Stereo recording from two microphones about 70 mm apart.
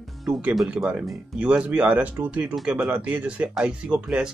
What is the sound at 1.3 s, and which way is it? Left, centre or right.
Speech, centre.